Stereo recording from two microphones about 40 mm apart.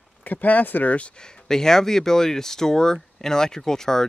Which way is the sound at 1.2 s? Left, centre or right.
Centre.